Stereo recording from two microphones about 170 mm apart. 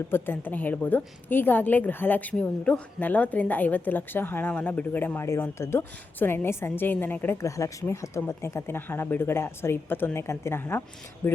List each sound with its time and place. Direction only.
0.1 s a woman's voice: 10° left (ahead or behind)